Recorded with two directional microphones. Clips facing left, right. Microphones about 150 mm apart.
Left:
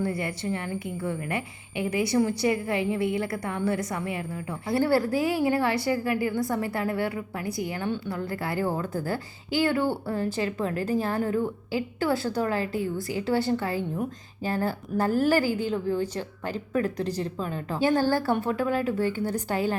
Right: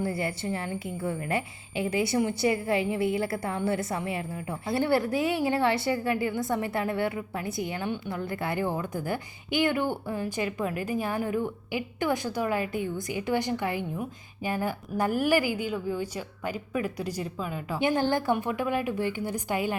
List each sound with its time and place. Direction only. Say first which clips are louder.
0.0 s a woman's voice: left 1 dB; 30° right (ahead or behind)